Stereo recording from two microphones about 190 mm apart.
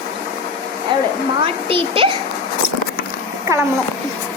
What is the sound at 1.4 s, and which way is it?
Speech, 30° right (ahead or behind).